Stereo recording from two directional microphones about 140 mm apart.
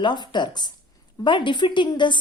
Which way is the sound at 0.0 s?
35° left (ahead or behind).